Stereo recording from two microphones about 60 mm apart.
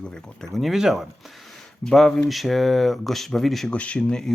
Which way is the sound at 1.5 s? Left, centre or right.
Centre.